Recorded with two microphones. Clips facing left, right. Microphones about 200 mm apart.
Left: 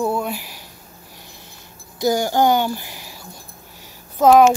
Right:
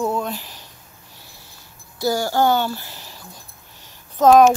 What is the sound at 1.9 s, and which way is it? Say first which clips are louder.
Speech: left 2 dB; 20° left (ahead or behind).